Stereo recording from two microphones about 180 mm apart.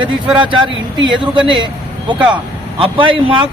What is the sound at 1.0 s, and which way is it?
Speech, 25° right (ahead or behind).